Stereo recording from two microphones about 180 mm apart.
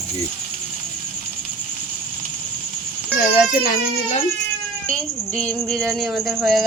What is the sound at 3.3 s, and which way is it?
Speech, 50° left (ahead or behind).